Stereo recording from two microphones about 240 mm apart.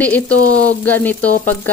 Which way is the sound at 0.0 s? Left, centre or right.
Centre.